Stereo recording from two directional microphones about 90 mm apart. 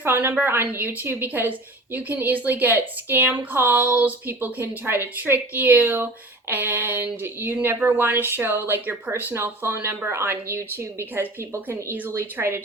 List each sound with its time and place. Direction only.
0.0 s speech: 20° right (ahead or behind)